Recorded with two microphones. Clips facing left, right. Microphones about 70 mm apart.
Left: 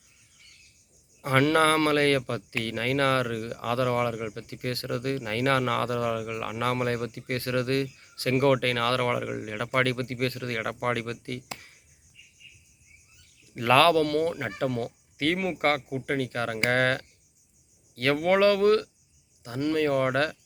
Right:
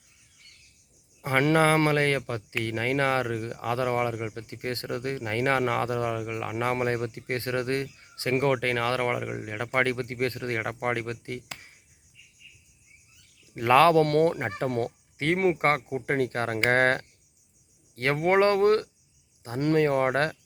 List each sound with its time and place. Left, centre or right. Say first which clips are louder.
1.2 s speech: even; right
13.5 s speech: right 1 dB; right
14.0 s speech: right 3 dB; right
14.3 s speech: even; right
14.7 s speech: right 2 dB; right